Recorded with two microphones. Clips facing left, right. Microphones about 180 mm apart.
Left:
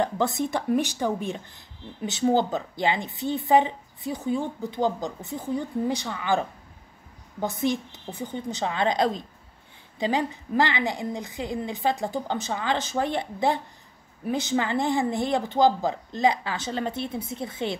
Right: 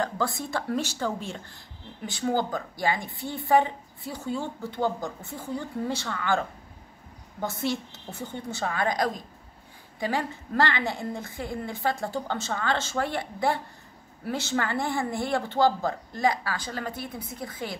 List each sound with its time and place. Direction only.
0.0 s a woman's voice: 20° left (ahead or behind)